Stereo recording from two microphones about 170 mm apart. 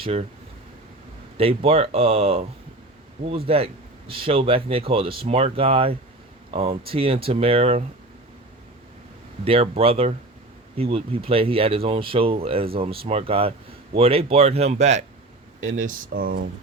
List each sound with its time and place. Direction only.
0.0 s speech: 35° right (ahead or behind)
1.4 s speech: 35° right (ahead or behind)
9.4 s speech: 35° right (ahead or behind); by 16.4 s 55° right (ahead or behind)